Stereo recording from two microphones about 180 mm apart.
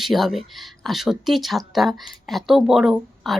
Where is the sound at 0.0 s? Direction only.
Centre (ahead or behind).